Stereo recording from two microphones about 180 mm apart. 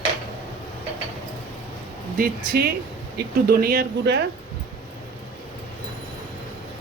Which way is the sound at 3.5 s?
55° right (ahead or behind).